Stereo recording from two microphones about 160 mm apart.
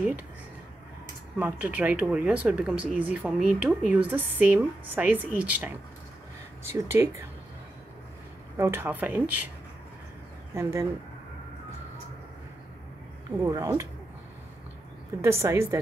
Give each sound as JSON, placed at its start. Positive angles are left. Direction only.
{"t": 1.4, "sound": "speech", "side_deg": -10}
{"t": 8.5, "sound": "speech", "side_deg": -15}
{"t": 10.5, "sound": "speech", "side_deg": -20}
{"t": 13.4, "sound": "speech", "side_deg": -20}
{"t": 15.2, "sound": "speech", "side_deg": -15}